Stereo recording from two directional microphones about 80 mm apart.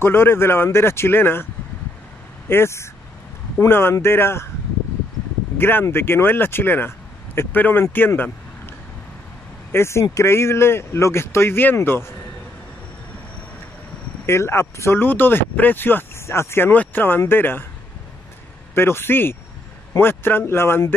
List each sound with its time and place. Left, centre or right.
0.0 s speech: left
5.6 s speech: left
9.7 s speech: left
14.2 s speech: left
18.8 s speech: left